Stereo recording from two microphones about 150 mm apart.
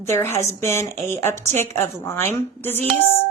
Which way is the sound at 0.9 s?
50° right (ahead or behind).